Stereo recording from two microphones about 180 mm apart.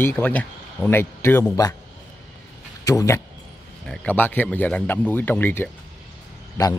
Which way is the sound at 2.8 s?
15° left (ahead or behind).